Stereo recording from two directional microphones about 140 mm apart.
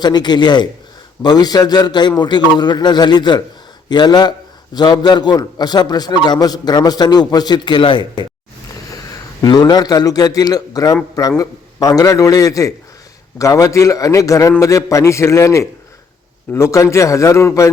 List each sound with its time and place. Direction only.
0.0 s a man's voice: 30° left (ahead or behind)
9.4 s a man's voice: 30° left (ahead or behind)